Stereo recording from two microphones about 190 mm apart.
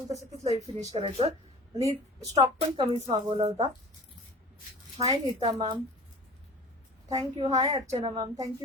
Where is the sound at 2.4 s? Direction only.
30° right (ahead or behind).